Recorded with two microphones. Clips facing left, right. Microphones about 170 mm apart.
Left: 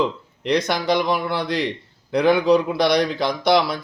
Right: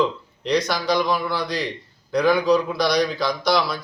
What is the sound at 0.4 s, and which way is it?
Speech, 25° left (ahead or behind).